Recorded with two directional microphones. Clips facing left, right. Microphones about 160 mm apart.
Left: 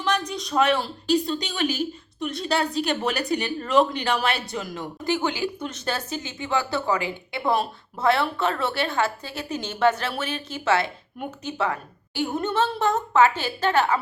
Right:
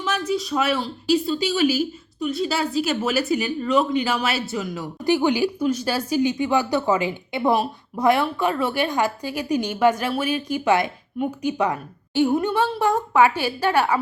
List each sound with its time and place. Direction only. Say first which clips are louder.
0.3 s a woman's voice: right 2 dB; 5° right (ahead or behind)
5.0 s a woman's voice: right 6 dB; 15° right (ahead or behind)